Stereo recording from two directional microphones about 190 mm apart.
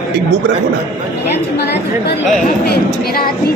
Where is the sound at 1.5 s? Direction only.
65° left (ahead or behind).